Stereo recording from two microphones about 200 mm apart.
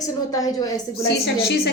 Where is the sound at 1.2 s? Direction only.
55° left (ahead or behind).